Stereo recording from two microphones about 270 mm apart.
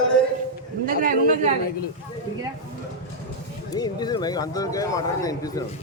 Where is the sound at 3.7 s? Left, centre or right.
Centre.